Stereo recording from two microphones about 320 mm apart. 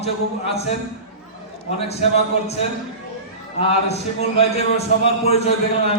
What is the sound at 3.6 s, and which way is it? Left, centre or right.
A man's voice, centre.